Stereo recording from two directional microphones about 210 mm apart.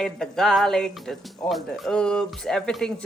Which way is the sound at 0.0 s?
Centre (ahead or behind).